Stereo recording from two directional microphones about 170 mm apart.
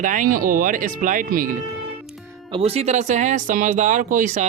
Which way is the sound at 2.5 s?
35° right (ahead or behind).